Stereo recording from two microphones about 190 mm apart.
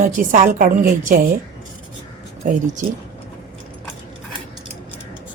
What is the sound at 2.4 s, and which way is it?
Speech, 40° right (ahead or behind).